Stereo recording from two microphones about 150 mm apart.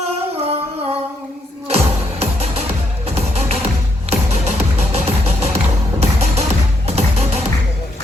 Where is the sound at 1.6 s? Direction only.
45° right (ahead or behind).